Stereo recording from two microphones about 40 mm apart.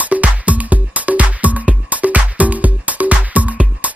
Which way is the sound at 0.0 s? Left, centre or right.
Right.